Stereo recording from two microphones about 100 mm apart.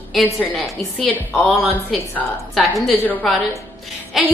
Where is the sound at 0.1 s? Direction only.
Centre (ahead or behind).